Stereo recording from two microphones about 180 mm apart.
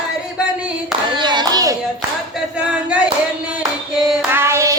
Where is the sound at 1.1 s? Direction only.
25° right (ahead or behind).